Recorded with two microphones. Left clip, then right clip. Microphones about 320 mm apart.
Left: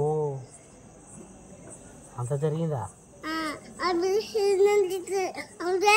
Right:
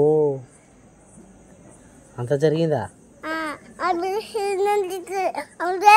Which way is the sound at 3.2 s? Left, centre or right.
Centre.